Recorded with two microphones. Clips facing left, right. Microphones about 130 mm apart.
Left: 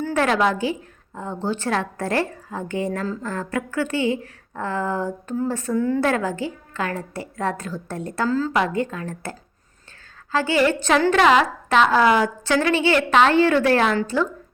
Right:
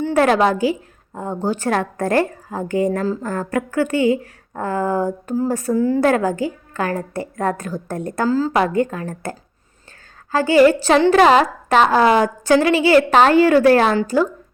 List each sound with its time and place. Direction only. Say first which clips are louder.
0.1 s a woman's voice: right 5 dB; 35° right (ahead or behind)
8.3 s a woman's voice: right 4 dB; 30° right (ahead or behind)
10.3 s a woman's voice: right 7 dB; 40° right (ahead or behind)